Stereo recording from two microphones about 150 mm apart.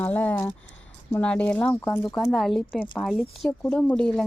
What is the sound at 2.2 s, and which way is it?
Speech, centre (ahead or behind).